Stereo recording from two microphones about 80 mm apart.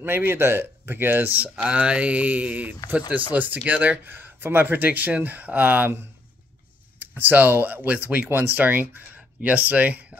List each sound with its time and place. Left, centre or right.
0.0 s speech: right
7.0 s speech: right